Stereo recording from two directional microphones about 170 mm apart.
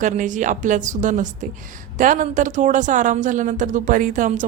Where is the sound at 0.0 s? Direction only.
50° right (ahead or behind).